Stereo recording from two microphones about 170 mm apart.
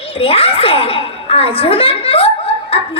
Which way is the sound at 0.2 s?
35° left (ahead or behind).